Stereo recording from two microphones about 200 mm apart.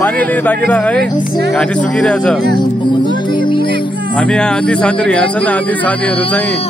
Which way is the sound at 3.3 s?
25° left (ahead or behind).